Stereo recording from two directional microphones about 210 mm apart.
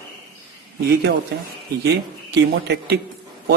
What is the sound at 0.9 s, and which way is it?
A man's voice, 50° right (ahead or behind).